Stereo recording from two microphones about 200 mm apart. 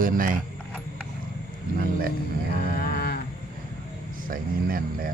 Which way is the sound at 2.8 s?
50° left (ahead or behind).